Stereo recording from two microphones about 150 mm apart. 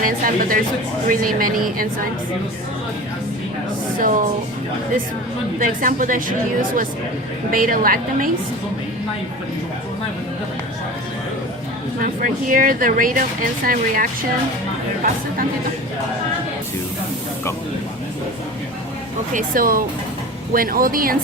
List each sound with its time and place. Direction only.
0.0 s speech: 70° right (ahead or behind)
3.9 s speech: 65° right (ahead or behind)
5.5 s a woman's voice: 65° right (ahead or behind)
12.0 s speech: 65° right (ahead or behind)
19.3 s speech: 65° right (ahead or behind)